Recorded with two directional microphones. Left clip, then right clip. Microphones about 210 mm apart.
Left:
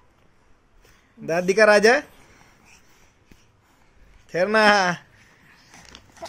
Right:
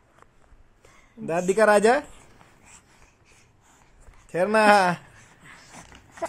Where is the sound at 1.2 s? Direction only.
5° left (ahead or behind).